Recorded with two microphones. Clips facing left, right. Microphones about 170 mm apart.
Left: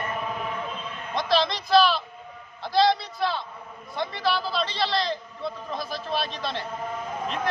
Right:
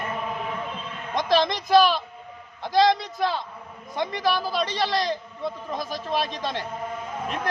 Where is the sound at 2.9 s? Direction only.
15° right (ahead or behind).